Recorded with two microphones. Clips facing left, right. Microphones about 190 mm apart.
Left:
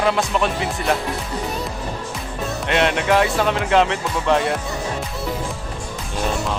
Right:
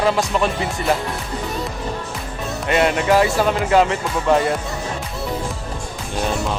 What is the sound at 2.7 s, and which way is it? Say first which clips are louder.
Speech: right 2 dB; 5° right (ahead or behind).